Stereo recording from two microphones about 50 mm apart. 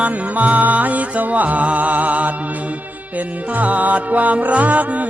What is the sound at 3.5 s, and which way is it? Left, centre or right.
Music, right.